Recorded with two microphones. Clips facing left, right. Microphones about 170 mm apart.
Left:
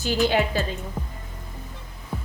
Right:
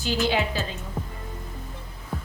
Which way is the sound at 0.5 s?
50° left (ahead or behind).